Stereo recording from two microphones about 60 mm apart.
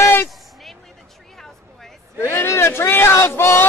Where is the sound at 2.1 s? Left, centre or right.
Left.